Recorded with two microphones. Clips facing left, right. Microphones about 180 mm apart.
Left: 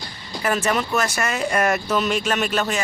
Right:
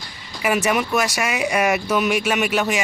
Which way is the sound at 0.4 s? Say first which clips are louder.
Right 2 dB; 10° right (ahead or behind).